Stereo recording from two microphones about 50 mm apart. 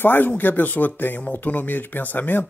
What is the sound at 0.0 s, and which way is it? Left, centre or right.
Speech, left.